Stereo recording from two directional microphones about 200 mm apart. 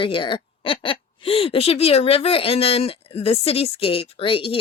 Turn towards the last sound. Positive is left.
turn(degrees=25)  # may be behind; listen again after turning